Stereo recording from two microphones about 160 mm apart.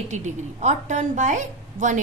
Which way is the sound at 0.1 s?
45° right (ahead or behind).